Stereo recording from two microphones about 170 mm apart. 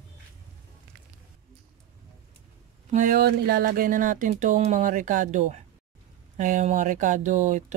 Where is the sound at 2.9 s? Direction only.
50° right (ahead or behind).